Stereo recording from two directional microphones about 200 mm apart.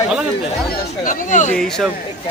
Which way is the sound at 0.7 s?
40° left (ahead or behind).